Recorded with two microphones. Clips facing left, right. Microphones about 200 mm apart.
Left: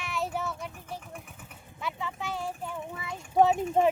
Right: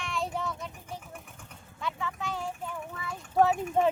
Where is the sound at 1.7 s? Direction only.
15° left (ahead or behind).